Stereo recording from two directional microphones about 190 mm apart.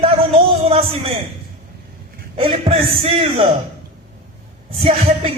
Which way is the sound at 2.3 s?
30° right (ahead or behind).